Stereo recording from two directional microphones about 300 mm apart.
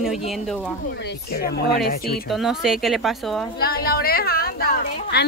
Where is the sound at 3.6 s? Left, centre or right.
Left.